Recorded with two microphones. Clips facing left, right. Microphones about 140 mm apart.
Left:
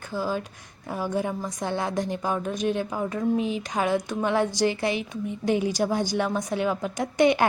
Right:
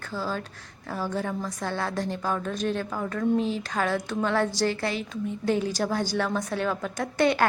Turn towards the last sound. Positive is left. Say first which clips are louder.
# left 3 dB
turn(degrees=15)  # may be behind; listen again after turning